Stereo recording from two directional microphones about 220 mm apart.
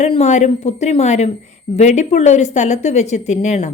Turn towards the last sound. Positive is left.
turn(degrees=30)  # may be behind; listen again after turning